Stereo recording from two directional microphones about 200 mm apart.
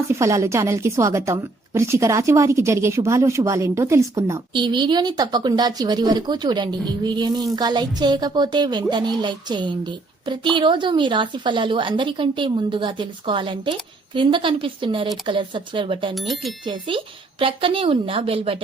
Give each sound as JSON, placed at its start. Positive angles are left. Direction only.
{"t": 0.1, "sound": "a woman's voice", "side_deg": -15}
{"t": 16.1, "sound": "speech", "side_deg": 0}
{"t": 17.4, "sound": "a woman's voice", "side_deg": -25}